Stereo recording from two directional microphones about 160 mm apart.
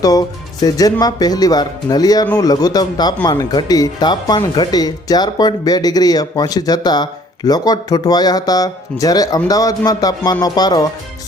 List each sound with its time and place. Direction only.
0.0 s speech: 25° left (ahead or behind)